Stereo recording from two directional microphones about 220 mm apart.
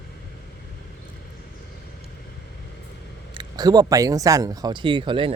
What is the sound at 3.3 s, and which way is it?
Speech, 20° right (ahead or behind).